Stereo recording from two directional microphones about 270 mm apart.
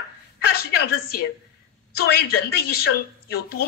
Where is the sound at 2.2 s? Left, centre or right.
Left.